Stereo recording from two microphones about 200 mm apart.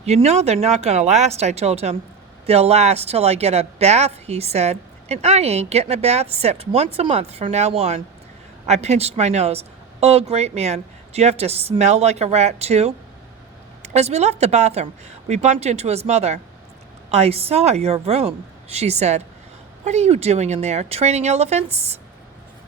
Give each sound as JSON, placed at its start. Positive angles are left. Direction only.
{"t": 0.0, "sound": "a woman's voice", "side_deg": -35}